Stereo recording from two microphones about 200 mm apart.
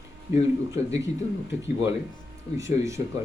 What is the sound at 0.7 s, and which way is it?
Speech, 15° right (ahead or behind).